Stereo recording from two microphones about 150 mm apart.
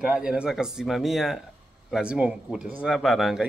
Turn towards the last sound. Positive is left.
turn(degrees=0)  # may be behind; listen again after turning